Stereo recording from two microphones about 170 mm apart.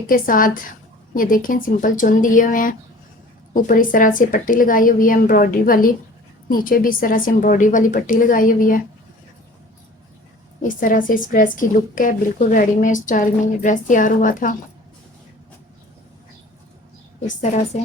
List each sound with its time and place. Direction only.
0.1 s a woman's voice: 55° left (ahead or behind)
10.6 s a woman's voice: 50° left (ahead or behind)
17.4 s a woman's voice: 45° left (ahead or behind)